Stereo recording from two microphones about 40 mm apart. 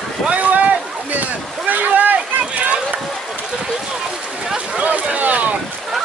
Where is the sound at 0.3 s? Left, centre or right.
Right.